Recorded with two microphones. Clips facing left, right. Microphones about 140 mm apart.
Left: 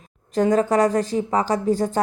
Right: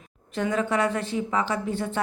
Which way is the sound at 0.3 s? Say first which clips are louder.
Left 7 dB; 40° left (ahead or behind).